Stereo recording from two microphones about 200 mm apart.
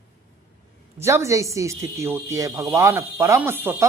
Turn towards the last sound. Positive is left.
turn(degrees=-10)  # may be behind; listen again after turning